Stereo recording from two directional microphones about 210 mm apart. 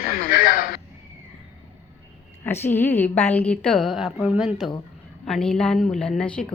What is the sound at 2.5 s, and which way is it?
A woman's voice, 10° left (ahead or behind).